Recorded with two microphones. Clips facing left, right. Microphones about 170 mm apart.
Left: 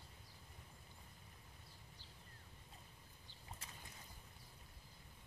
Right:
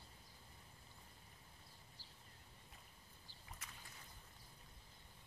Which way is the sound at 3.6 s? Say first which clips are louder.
Left 1 dB; 30° left (ahead or behind).